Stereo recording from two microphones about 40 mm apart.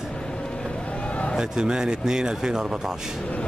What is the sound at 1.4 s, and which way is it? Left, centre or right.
A man's voice, centre.